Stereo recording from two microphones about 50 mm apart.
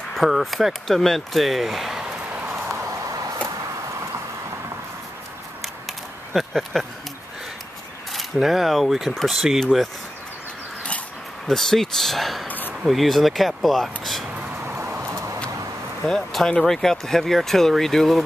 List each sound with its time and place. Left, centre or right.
0.1 s speech: centre
2.7 s clip-clop: right
6.3 s speech: centre
8.1 s speech: centre
11.4 s speech: centre
12.4 s a sound: left
12.8 s speech: centre
15.0 s vehicle: right
16.4 s speech: centre